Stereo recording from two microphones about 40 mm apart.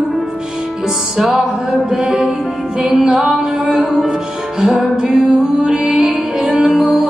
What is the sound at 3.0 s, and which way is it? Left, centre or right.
Music, centre.